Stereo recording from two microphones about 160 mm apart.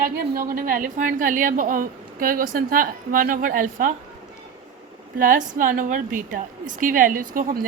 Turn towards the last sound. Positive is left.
turn(degrees=-60)  # may be behind; listen again after turning